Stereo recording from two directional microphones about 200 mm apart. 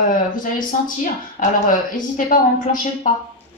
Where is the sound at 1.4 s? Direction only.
40° left (ahead or behind).